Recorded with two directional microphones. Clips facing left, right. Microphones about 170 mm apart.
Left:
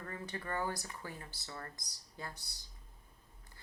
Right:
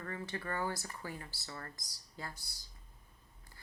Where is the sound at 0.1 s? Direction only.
20° left (ahead or behind).